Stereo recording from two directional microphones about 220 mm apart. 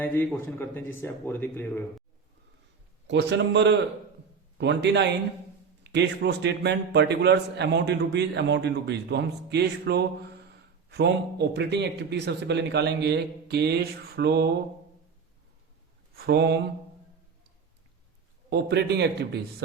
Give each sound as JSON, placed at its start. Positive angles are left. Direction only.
{"t": 0.0, "sound": "speech", "side_deg": 10}
{"t": 3.1, "sound": "a man's voice", "side_deg": -55}
{"t": 16.1, "sound": "a man's voice", "side_deg": -50}
{"t": 18.5, "sound": "a man's voice", "side_deg": -50}